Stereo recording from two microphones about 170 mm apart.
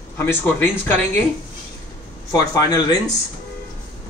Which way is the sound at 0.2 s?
10° left (ahead or behind).